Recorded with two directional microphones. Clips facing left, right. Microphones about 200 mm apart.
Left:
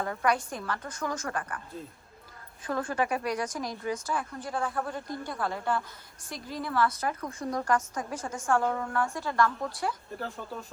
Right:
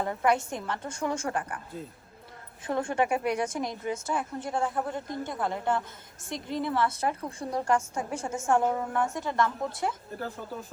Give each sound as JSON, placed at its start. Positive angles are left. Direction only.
{"t": 0.0, "sound": "speech", "side_deg": -20}
{"t": 1.4, "sound": "speech", "side_deg": -15}
{"t": 2.6, "sound": "speech", "side_deg": -25}
{"t": 10.2, "sound": "speech", "side_deg": 0}